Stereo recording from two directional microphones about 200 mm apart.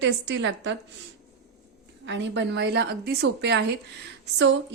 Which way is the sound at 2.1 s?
60° right (ahead or behind).